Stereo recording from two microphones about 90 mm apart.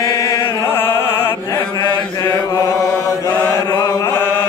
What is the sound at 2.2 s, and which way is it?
Chant, 45° left (ahead or behind).